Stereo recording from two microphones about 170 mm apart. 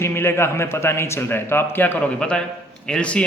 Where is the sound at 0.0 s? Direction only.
15° left (ahead or behind).